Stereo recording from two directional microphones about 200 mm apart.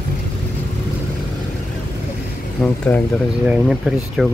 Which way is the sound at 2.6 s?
5° left (ahead or behind).